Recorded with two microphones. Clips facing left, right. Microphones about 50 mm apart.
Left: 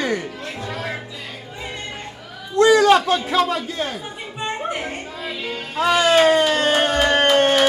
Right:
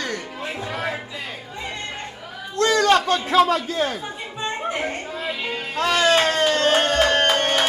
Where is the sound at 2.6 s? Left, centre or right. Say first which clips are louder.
Left 4 dB; centre.